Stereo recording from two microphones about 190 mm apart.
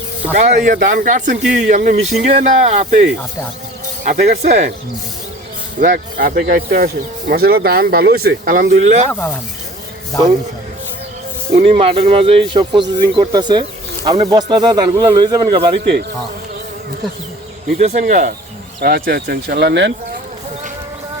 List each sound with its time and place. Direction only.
0.3 s speech: 40° right (ahead or behind)
5.8 s speech: 45° right (ahead or behind)
9.0 s speech: 10° left (ahead or behind)
11.5 s speech: 30° right (ahead or behind)
15.8 s speech: 60° right (ahead or behind)
17.7 s speech: 40° right (ahead or behind)
18.8 s speech: 55° right (ahead or behind)